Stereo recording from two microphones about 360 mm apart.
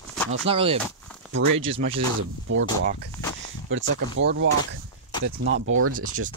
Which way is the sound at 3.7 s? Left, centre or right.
Right.